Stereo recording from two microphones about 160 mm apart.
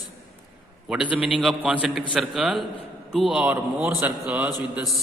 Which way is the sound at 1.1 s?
5° right (ahead or behind).